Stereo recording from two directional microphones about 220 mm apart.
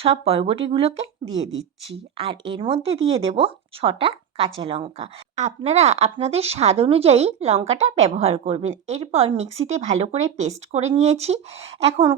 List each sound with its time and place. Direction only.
0.0 s speech: 25° right (ahead or behind)